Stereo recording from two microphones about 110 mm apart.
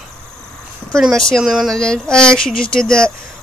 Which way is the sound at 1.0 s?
5° left (ahead or behind).